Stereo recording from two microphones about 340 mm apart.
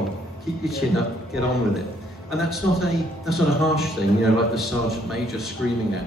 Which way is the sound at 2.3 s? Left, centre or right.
Centre.